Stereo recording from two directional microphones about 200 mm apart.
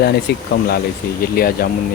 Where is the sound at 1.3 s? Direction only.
50° left (ahead or behind).